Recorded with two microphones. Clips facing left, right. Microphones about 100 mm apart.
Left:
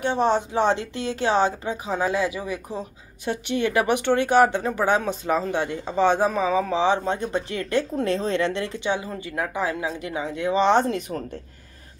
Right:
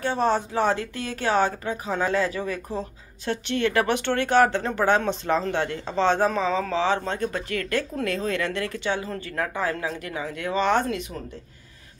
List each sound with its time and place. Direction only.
0.0 s speech: 20° left (ahead or behind)
11.0 s speech: 45° left (ahead or behind)